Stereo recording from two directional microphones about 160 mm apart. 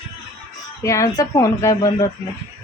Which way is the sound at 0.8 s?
20° left (ahead or behind).